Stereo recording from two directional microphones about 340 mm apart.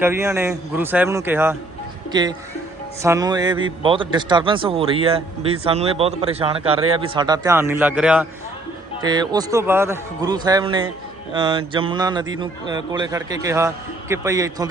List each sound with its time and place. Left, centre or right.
0.0 s a man's voice: centre